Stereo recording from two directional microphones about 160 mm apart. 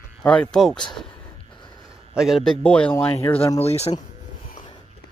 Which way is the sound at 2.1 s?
Centre (ahead or behind).